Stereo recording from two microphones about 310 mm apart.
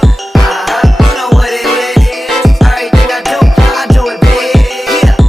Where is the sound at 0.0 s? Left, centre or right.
Centre.